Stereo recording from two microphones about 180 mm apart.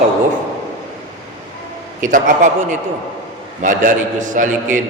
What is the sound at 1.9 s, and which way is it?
Speech, 45° right (ahead or behind).